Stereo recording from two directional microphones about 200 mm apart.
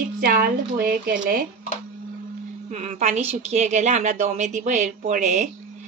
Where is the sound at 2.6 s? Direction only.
35° right (ahead or behind).